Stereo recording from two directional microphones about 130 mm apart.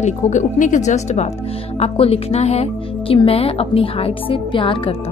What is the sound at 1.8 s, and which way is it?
A woman's voice, 50° left (ahead or behind).